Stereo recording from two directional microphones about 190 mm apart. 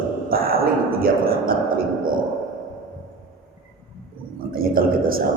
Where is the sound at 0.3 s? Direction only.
50° right (ahead or behind).